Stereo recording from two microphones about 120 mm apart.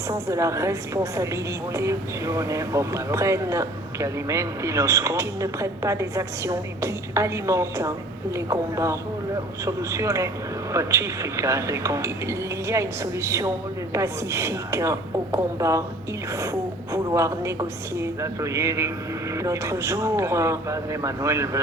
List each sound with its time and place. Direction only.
0.1 s a woman's voice: 25° right (ahead or behind)